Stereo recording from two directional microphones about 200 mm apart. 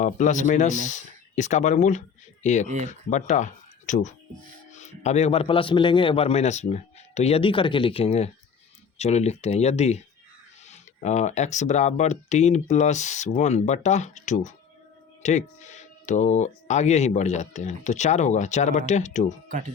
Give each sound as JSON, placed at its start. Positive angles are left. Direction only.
{"t": 0.0, "sound": "speech", "side_deg": 40}
{"t": 2.6, "sound": "speech", "side_deg": -35}
{"t": 3.1, "sound": "a man's voice", "side_deg": 35}
{"t": 19.5, "sound": "speech", "side_deg": -40}